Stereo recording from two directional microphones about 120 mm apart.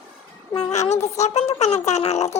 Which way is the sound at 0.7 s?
70° left (ahead or behind).